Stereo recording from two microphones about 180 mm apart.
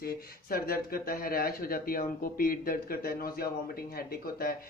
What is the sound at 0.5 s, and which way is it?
Speech, 55° left (ahead or behind).